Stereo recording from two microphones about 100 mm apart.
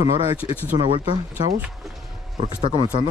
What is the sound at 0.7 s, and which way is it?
Speech, 55° right (ahead or behind).